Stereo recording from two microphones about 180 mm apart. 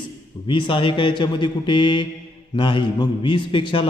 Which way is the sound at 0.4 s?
30° left (ahead or behind).